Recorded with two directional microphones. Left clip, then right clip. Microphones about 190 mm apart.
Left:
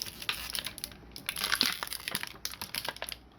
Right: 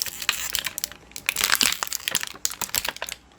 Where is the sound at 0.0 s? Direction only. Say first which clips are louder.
Right 9 dB; 15° right (ahead or behind).